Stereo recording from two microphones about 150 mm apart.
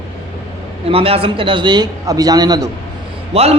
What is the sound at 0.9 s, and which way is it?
Speech, 40° right (ahead or behind).